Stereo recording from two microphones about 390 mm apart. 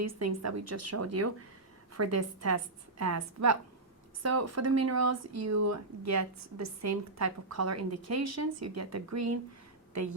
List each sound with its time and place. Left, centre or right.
0.0 s a woman's voice: right